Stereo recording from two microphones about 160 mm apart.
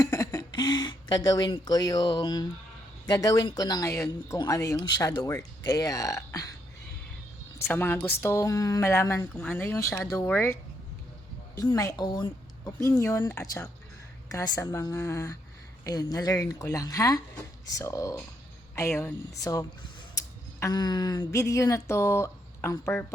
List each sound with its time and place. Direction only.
0.0 s speech: 20° left (ahead or behind)
7.7 s a woman's voice: 10° left (ahead or behind)